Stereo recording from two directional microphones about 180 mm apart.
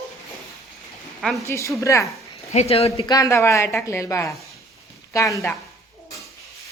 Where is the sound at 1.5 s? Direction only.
15° left (ahead or behind).